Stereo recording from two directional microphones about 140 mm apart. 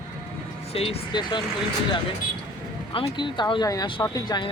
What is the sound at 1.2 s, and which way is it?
Speech, 35° left (ahead or behind).